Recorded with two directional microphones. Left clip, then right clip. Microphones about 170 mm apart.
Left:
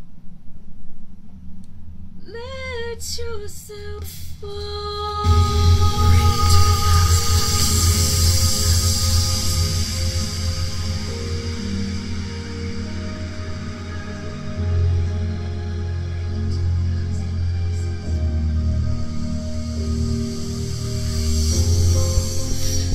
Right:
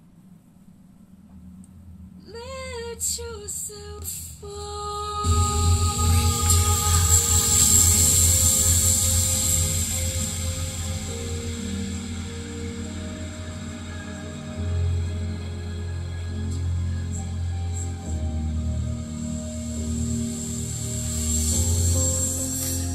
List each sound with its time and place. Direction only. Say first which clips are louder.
2.4 s female singing: left 4 dB; 20° left (ahead or behind)
4.6 s music: left 3 dB; 40° left (ahead or behind)